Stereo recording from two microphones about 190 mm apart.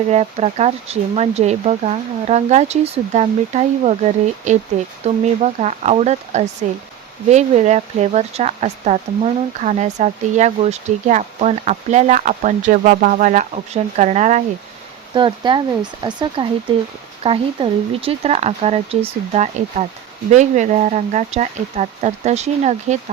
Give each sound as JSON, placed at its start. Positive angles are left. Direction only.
{"t": 0.1, "sound": "speech", "side_deg": -35}
{"t": 15.1, "sound": "speech", "side_deg": -25}